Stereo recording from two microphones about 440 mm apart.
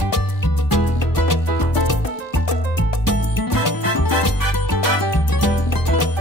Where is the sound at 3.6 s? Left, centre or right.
Left.